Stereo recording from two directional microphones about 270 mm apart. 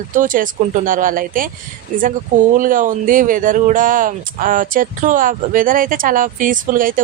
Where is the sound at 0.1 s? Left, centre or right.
Right.